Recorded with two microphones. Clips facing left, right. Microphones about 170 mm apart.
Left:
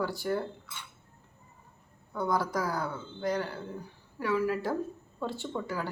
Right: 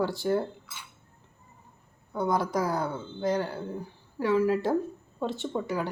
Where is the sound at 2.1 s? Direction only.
20° right (ahead or behind).